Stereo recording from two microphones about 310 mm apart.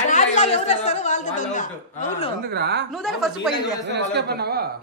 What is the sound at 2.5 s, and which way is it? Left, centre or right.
Speech, right.